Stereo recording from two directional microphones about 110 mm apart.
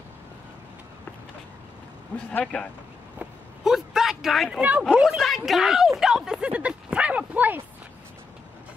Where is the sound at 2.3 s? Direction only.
15° left (ahead or behind).